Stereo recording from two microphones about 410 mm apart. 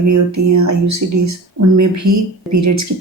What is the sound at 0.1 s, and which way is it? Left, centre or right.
A woman's voice, right.